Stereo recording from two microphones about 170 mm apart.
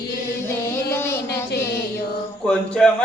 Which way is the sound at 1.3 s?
75° left (ahead or behind).